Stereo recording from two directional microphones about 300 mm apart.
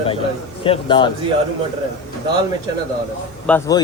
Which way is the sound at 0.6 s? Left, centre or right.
Centre.